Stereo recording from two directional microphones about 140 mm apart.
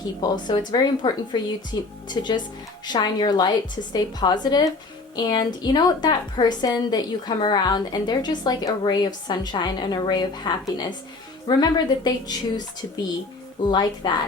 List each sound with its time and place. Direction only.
0.2 s a woman's voice: 30° left (ahead or behind)